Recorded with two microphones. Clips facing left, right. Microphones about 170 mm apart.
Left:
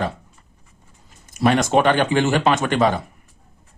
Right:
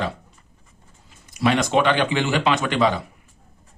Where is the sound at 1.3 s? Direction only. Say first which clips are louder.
Left 2 dB; 45° left (ahead or behind).